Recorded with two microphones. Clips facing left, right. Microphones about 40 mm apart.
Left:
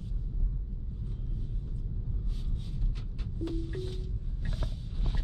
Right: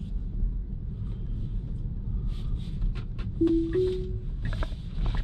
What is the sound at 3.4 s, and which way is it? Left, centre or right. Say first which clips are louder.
Music: right 14 dB; right.